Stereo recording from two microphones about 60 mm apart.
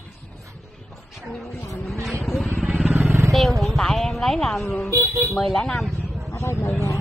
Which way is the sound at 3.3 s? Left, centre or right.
Centre.